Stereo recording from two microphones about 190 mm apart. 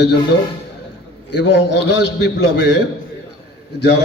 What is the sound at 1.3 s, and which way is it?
A man's voice, 65° left (ahead or behind).